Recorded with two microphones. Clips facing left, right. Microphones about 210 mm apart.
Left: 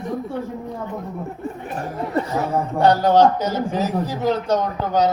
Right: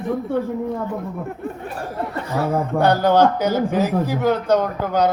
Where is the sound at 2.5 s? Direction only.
55° right (ahead or behind).